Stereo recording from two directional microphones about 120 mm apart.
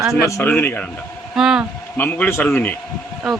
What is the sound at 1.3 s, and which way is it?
Speech, 5° right (ahead or behind).